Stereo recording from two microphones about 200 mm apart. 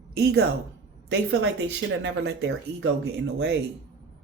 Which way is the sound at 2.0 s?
60° right (ahead or behind).